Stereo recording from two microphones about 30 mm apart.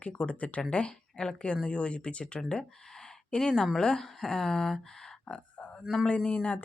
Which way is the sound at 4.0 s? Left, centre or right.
Centre.